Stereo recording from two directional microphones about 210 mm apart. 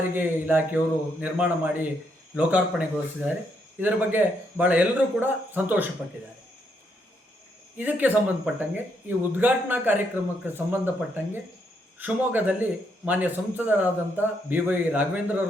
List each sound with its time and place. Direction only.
0.1 s speech: 10° right (ahead or behind)
7.8 s speech: 10° right (ahead or behind)